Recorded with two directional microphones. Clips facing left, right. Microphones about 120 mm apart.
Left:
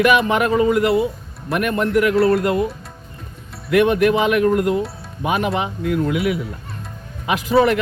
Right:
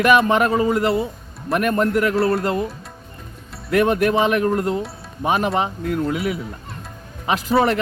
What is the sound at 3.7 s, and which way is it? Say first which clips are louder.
A man's voice: left 2 dB; 40° right (ahead or behind).